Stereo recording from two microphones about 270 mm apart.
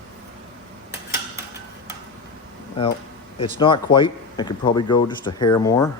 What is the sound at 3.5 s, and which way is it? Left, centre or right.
Speech, centre.